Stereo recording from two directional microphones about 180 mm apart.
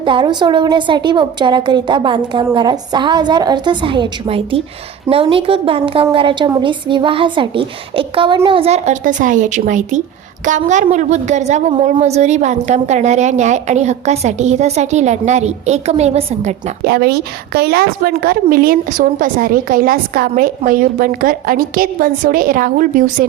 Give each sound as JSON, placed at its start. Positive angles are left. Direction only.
{"t": 0.0, "sound": "a woman's voice", "side_deg": -25}
{"t": 16.8, "sound": "a woman's voice", "side_deg": -60}